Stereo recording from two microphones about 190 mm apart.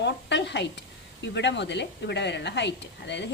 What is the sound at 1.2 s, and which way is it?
A woman's voice, 65° left (ahead or behind).